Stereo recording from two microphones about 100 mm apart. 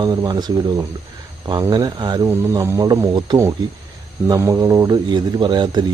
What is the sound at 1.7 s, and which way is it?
Speech, 45° right (ahead or behind).